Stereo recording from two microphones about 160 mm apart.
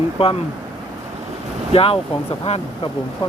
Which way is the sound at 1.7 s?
35° left (ahead or behind).